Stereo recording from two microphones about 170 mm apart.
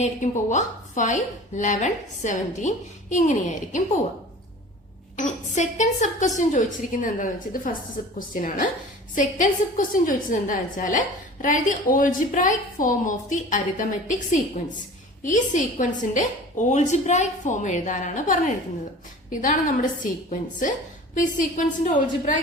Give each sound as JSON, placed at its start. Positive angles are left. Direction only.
{"t": 0.0, "sound": "a woman's voice", "side_deg": 45}
{"t": 5.1, "sound": "a woman's voice", "side_deg": 45}
{"t": 21.2, "sound": "a woman's voice", "side_deg": 50}